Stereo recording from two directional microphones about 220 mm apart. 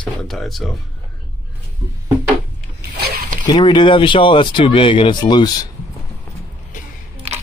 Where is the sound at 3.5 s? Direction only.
20° left (ahead or behind).